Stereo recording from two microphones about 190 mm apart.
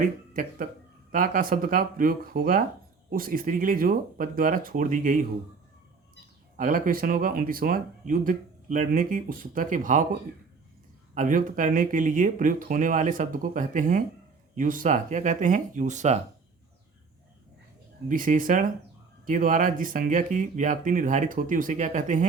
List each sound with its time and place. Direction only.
1.1 s speech: 45° right (ahead or behind)
6.6 s speech: 45° right (ahead or behind)
11.1 s speech: 45° right (ahead or behind)
18.1 s speech: 45° right (ahead or behind)